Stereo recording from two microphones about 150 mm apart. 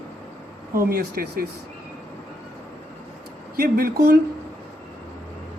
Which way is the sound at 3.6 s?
85° right.